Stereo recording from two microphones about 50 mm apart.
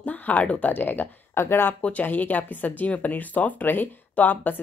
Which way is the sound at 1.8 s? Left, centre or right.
Left.